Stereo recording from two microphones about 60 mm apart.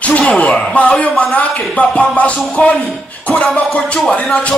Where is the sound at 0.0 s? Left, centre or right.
Left.